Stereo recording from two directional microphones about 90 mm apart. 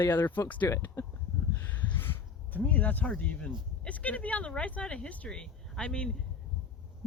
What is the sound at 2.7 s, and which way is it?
Speech, 20° left (ahead or behind).